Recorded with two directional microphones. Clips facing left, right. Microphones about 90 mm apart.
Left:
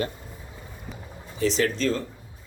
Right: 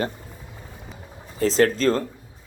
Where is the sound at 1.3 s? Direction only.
45° right (ahead or behind).